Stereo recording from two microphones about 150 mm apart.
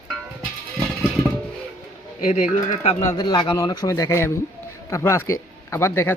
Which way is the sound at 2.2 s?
55° left (ahead or behind).